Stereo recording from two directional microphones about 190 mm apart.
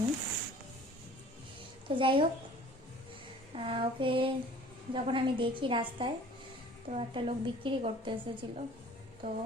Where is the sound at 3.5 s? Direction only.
30° right (ahead or behind).